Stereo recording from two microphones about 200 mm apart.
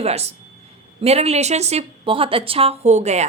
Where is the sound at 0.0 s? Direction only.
30° right (ahead or behind).